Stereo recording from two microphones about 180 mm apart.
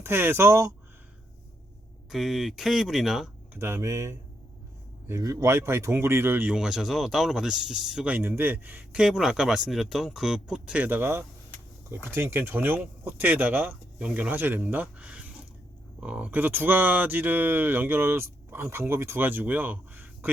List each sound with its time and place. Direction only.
0.0 s speech: 10° right (ahead or behind)
2.0 s speech: centre (ahead or behind)
3.5 s speech: 15° right (ahead or behind)